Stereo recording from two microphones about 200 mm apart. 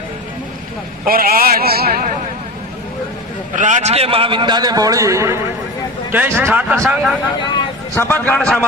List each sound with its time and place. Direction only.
1.0 s a man's voice: 45° right (ahead or behind)
3.5 s a man's voice: 35° right (ahead or behind); by 7.2 s 5° right (ahead or behind)
7.5 s a man's voice: 15° left (ahead or behind)